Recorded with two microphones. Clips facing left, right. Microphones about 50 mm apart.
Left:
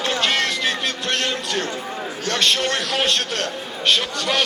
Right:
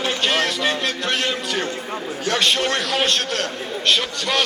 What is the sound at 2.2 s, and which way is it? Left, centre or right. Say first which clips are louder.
A man's voice: right 1 dB; centre.